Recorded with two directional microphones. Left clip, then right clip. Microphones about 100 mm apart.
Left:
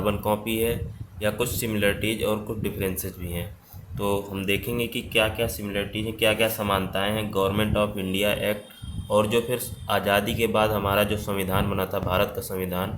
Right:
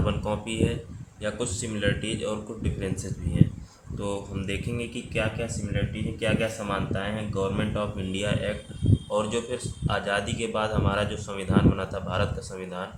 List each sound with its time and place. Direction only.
0.0 s speech: 50° left (ahead or behind)
1.2 s a man's voice: 65° left (ahead or behind)
4.0 s a man's voice: 65° left (ahead or behind)